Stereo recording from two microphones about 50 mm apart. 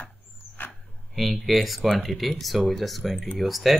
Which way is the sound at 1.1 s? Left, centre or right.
Centre.